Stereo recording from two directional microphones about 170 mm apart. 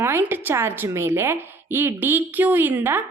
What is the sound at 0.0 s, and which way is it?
A woman's voice, 15° right (ahead or behind).